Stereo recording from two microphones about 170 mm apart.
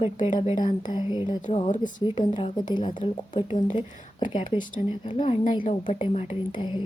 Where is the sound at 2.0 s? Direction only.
25° left (ahead or behind).